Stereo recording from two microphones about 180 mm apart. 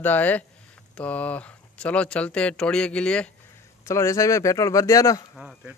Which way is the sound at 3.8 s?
15° left (ahead or behind).